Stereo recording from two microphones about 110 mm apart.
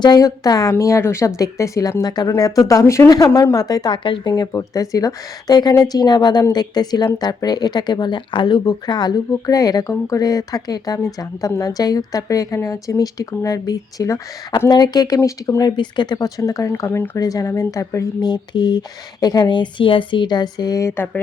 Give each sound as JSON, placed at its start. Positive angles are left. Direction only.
{"t": 0.0, "sound": "a woman's voice", "side_deg": 35}
{"t": 4.3, "sound": "a woman's voice", "side_deg": 35}
{"t": 17.2, "sound": "a woman's voice", "side_deg": 35}